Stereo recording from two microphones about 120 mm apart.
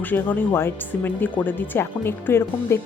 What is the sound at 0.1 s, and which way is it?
Speech, 15° left (ahead or behind).